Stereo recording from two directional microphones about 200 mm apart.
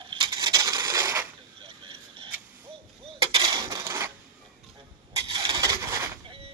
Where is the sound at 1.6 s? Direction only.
25° right (ahead or behind).